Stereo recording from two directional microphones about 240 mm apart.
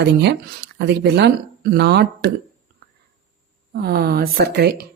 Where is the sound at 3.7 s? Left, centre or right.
Right.